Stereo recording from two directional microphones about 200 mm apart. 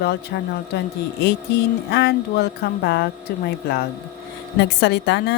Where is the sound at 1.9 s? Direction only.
55° left (ahead or behind).